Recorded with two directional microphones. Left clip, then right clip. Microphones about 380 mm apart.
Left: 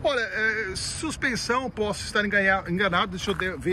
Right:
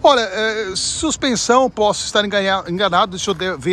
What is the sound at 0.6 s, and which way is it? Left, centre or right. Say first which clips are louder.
Speech: right 9 dB; centre.